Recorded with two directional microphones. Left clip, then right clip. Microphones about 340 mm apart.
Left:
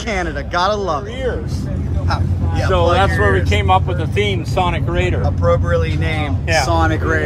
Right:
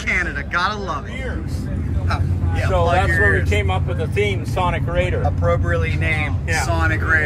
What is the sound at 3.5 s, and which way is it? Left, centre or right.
Speech, left.